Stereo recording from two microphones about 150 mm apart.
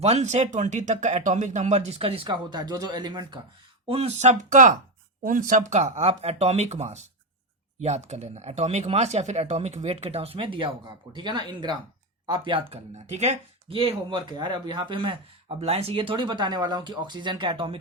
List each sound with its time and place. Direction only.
0.0 s speech: 45° right (ahead or behind)
3.8 s speech: 40° right (ahead or behind)